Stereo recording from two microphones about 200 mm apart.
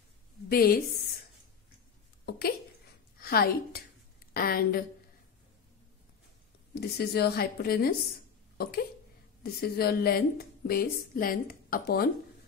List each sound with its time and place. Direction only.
0.5 s a woman's voice: 50° left (ahead or behind)
2.2 s a sound: 50° left (ahead or behind)
3.2 s a woman's voice: 50° left (ahead or behind)
6.7 s a woman's voice: 55° left (ahead or behind)